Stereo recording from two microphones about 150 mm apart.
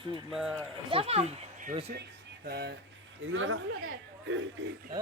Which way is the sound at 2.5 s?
90° right.